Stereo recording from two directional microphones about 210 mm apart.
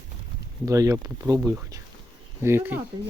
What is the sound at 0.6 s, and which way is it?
Speech, 15° right (ahead or behind).